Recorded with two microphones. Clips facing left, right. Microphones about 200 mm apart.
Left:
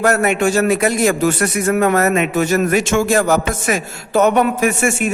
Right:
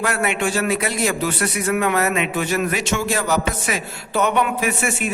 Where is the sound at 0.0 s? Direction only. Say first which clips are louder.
Left 7 dB; 45° left (ahead or behind).